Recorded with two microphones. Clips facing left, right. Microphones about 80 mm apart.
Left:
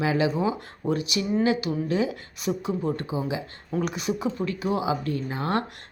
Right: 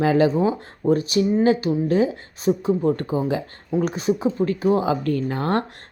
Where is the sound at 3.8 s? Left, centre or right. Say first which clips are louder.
Right 6 dB; right.